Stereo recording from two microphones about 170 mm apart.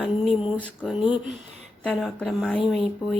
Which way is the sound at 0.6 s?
5° left (ahead or behind).